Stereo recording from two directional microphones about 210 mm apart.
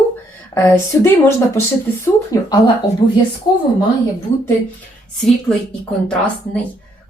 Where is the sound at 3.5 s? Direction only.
20° left (ahead or behind).